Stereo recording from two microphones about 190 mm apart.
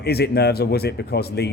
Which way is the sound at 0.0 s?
55° left (ahead or behind).